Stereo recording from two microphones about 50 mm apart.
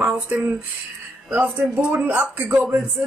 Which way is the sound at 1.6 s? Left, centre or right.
Right.